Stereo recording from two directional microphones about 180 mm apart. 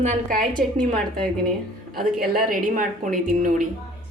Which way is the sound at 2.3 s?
50° right (ahead or behind).